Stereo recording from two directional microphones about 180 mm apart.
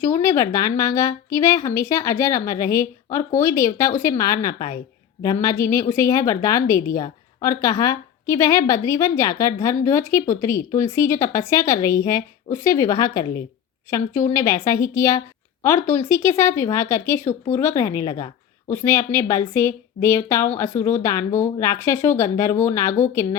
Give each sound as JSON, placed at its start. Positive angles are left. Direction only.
{"t": 0.0, "sound": "a woman's voice", "side_deg": 15}